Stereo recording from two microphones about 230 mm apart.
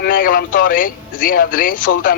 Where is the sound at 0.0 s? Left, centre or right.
Left.